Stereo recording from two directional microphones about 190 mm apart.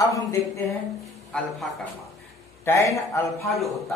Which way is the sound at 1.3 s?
5° left (ahead or behind).